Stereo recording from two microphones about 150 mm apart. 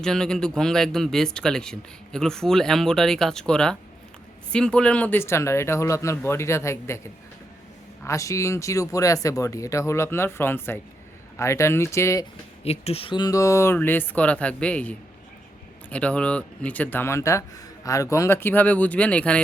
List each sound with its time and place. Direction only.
0.0 s speech: 5° left (ahead or behind)
8.0 s speech: 20° left (ahead or behind)
12.6 s speech: 45° left (ahead or behind); by 19.4 s 10° left (ahead or behind)